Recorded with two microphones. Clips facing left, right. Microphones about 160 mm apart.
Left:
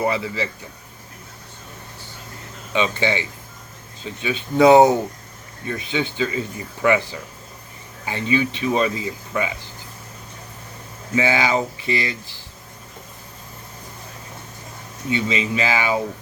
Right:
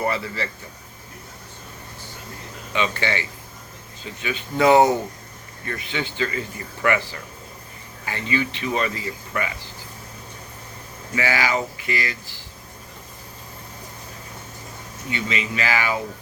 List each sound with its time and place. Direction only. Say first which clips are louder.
0.0 s speech: left 3 dB; 15° left (ahead or behind)
2.7 s speech: left 3 dB; 20° left (ahead or behind)
11.1 s speech: left 3 dB; 20° left (ahead or behind)
15.1 s speech: left 5 dB; 20° left (ahead or behind)